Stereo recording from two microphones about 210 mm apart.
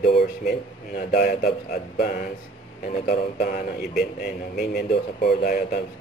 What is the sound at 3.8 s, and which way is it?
Speech, centre (ahead or behind).